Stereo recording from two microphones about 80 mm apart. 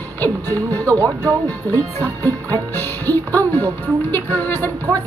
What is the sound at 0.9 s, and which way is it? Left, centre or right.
Speech, right.